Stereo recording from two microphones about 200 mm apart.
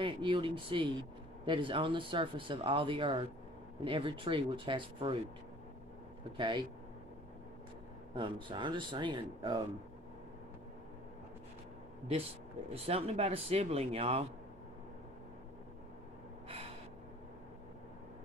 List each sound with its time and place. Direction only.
0.0 s speech: 25° right (ahead or behind)
6.3 s speech: 25° right (ahead or behind)
8.2 s speech: 25° right (ahead or behind)
12.7 s speech: 30° right (ahead or behind)